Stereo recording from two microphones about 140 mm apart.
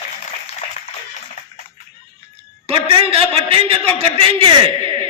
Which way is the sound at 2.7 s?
40° right (ahead or behind).